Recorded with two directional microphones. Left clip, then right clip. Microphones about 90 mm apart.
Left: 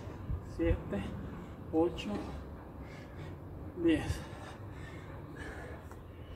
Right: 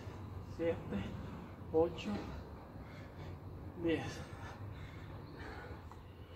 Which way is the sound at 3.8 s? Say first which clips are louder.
Left 6 dB; 20° right (ahead or behind).